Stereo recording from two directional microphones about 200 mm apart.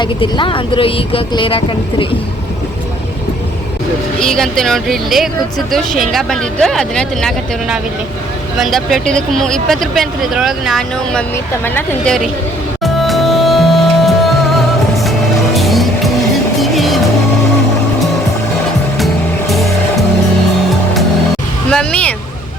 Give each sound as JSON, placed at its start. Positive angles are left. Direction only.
{"t": 0.0, "sound": "speech", "side_deg": 25}
{"t": 4.2, "sound": "speech", "side_deg": 0}
{"t": 12.8, "sound": "music", "side_deg": 0}
{"t": 19.5, "sound": "music", "side_deg": 0}
{"t": 21.7, "sound": "vehicle", "side_deg": 5}